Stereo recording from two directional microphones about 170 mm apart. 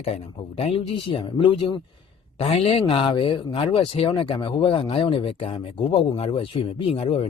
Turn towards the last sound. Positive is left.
turn(degrees=35)  # may be behind; listen again after turning